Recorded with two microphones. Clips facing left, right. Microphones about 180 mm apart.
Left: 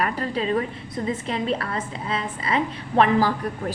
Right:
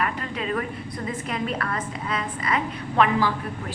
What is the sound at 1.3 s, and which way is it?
A woman's voice, 30° left (ahead or behind).